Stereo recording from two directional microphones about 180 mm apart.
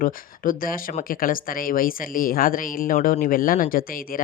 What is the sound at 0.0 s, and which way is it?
Speech, 50° left (ahead or behind).